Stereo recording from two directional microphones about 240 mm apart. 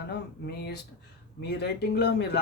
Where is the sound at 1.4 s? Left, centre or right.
Left.